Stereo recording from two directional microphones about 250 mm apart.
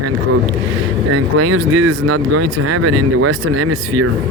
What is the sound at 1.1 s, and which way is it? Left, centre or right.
Speech, right.